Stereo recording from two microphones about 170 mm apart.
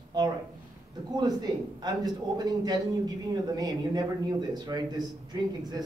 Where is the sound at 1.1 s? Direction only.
25° right (ahead or behind).